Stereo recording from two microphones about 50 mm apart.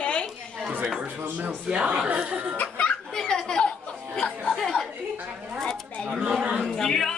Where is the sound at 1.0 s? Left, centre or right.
Right.